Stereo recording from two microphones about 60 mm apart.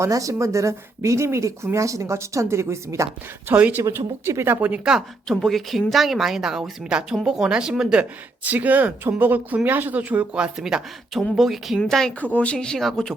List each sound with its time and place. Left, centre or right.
0.1 s speech: right
3.5 s speech: right
3.9 s speech: right
5.3 s a woman's voice: centre
8.4 s speech: right; by 12.1 s centre
12.2 s speech: left
12.5 s speech: centre